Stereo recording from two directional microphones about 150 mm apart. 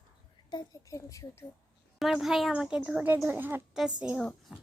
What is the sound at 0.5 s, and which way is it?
Speech, 25° left (ahead or behind).